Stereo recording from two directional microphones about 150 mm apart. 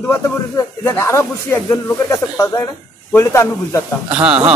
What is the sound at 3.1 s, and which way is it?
Speech, 20° left (ahead or behind).